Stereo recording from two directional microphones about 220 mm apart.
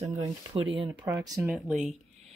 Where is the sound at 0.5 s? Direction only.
25° right (ahead or behind).